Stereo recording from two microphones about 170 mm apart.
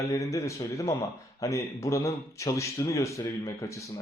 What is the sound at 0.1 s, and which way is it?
Speech, 20° left (ahead or behind).